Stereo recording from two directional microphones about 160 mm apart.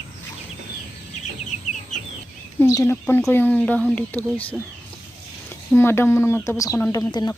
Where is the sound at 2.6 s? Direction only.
20° left (ahead or behind).